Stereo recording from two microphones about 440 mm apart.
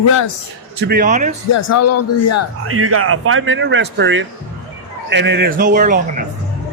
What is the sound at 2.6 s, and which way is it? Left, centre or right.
Speech, right.